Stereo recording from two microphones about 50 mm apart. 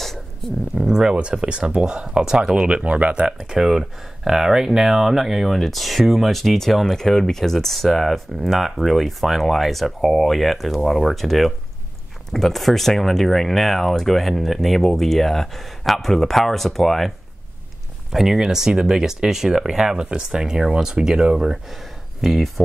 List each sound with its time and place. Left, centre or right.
0.0 s a sound: centre
0.7 s a sound: centre
1.3 s speech: centre
2.7 s speech: right
3.3 s speech: centre
18.1 s speech: centre
22.2 s speech: centre